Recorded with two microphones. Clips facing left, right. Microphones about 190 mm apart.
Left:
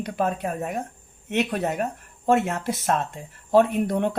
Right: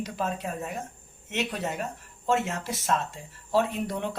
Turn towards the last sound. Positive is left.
turn(degrees=55)  # may be behind; listen again after turning